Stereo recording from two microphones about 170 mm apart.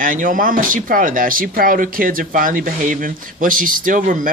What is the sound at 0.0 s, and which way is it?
Speech, 50° right (ahead or behind).